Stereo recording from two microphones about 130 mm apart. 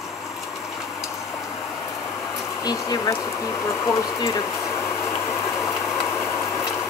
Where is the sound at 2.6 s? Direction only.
30° left (ahead or behind).